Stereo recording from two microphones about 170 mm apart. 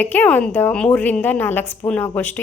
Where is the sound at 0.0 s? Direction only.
10° left (ahead or behind).